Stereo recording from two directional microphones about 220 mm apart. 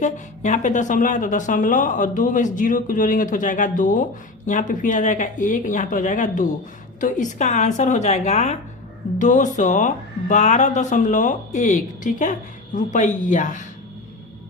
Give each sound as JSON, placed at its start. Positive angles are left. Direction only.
{"t": 0.0, "sound": "speech", "side_deg": 35}